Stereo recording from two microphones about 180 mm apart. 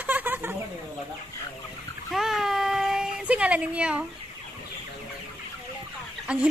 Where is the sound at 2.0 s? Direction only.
Centre (ahead or behind).